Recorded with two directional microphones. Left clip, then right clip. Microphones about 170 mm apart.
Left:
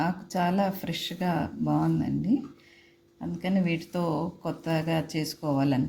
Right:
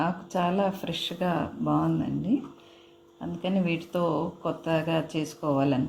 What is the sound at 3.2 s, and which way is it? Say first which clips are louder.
Speech: right 1 dB; 45° left (ahead or behind).